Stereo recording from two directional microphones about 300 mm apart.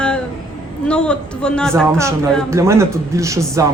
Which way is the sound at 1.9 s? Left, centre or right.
Centre.